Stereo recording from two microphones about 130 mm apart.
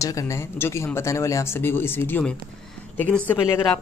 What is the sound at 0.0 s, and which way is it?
Speech, 25° left (ahead or behind).